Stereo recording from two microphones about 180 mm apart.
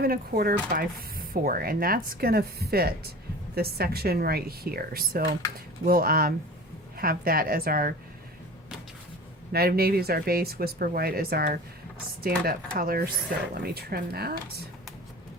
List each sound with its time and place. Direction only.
0.0 s speech: 55° right (ahead or behind)
9.5 s speech: 60° right (ahead or behind)